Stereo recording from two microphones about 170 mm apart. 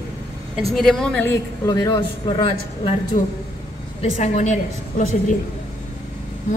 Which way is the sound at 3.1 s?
45° left (ahead or behind).